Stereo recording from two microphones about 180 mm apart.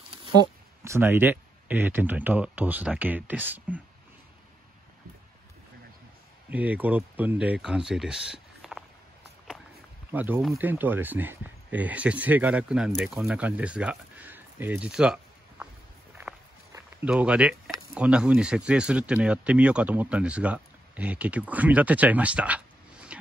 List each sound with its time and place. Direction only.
0.2 s speech: 20° right (ahead or behind)
6.5 s speech: 10° right (ahead or behind)
10.1 s speech: 10° right (ahead or behind)
16.2 s walk: 10° right (ahead or behind)
17.9 s speech: 5° right (ahead or behind)